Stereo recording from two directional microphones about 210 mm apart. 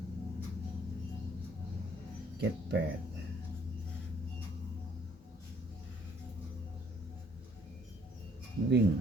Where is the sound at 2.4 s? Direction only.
55° right (ahead or behind).